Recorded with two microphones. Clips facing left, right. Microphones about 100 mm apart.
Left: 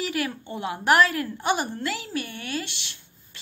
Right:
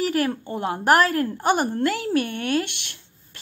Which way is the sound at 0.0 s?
40° right (ahead or behind).